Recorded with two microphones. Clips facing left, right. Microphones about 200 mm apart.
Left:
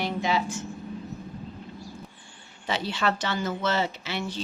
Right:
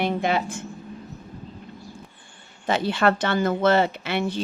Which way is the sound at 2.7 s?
50° right (ahead or behind).